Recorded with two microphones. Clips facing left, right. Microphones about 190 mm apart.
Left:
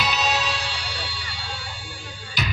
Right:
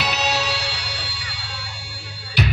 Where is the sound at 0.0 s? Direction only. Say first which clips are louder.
Right 1 dB; 70° right (ahead or behind).